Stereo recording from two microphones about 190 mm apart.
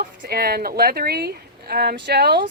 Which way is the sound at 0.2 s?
55° right (ahead or behind).